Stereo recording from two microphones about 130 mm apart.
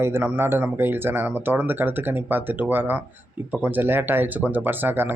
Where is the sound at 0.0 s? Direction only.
15° right (ahead or behind).